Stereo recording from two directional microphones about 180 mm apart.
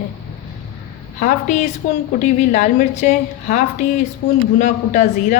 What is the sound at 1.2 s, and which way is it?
A woman's voice, 45° left (ahead or behind).